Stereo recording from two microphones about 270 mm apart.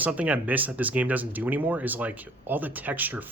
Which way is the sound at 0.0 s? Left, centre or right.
Centre.